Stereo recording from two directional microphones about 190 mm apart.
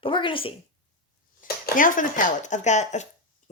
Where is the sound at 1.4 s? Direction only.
50° left (ahead or behind).